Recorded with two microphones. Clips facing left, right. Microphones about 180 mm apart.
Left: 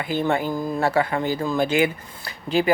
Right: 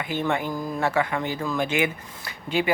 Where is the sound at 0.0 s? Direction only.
35° left (ahead or behind).